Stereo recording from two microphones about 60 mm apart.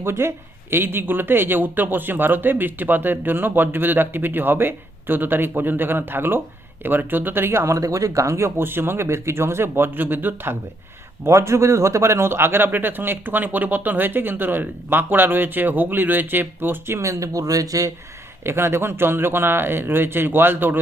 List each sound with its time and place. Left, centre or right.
0.0 s speech: right
7.6 s speech: right
11.3 s speech: right
17.0 s speech: right
18.4 s speech: right